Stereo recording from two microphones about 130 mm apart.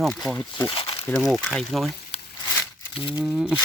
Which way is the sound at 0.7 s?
45° left (ahead or behind).